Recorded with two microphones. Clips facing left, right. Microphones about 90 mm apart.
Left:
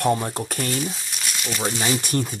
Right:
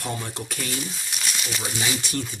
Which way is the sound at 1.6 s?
45° left (ahead or behind).